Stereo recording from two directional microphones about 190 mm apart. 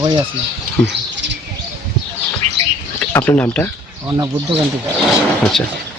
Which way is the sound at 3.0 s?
10° left (ahead or behind).